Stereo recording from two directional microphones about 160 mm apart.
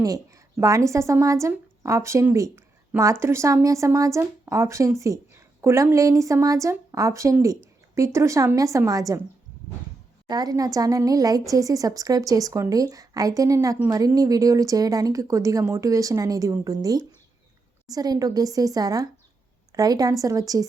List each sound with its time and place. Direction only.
0.0 s speech: 20° right (ahead or behind)
10.2 s speech: 25° right (ahead or behind)